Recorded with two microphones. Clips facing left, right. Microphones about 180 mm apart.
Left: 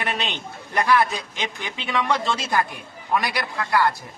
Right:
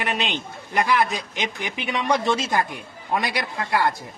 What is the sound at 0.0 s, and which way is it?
A man's voice, 15° right (ahead or behind).